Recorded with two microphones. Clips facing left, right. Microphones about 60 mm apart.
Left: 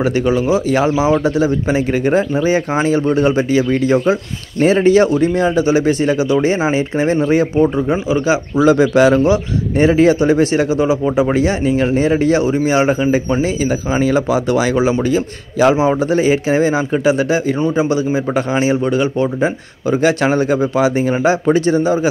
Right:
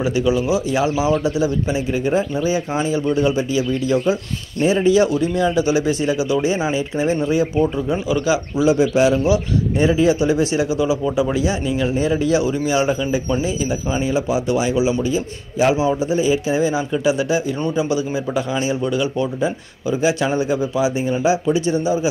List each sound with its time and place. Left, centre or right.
0.0 s speech: left
1.1 s speech: left
3.9 s speech: left
4.6 s speech: left
7.5 s speech: left
8.6 s speech: left
9.2 s speech: left
13.4 s speech: left
20.0 s speech: left
20.7 s speech: left